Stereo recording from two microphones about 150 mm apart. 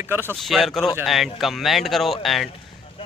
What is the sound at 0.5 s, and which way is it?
A man's voice, centre (ahead or behind).